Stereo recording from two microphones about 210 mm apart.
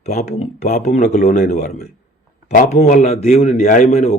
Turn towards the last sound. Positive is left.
turn(degrees=35)  # may be behind; listen again after turning